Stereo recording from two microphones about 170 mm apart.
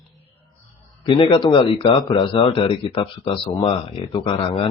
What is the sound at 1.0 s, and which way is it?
Speech, 30° left (ahead or behind).